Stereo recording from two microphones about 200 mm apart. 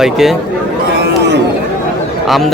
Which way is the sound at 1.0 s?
60° right (ahead or behind).